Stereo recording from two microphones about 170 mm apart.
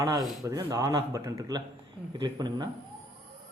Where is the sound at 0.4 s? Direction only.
20° right (ahead or behind).